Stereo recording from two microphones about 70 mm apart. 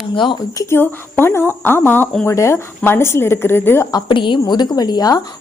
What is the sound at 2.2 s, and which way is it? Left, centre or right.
A woman's voice, left.